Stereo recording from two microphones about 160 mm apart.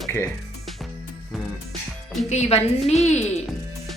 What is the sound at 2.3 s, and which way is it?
Speech, 40° left (ahead or behind).